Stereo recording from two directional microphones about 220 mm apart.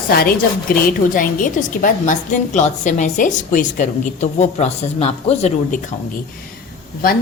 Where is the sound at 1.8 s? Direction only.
35° left (ahead or behind).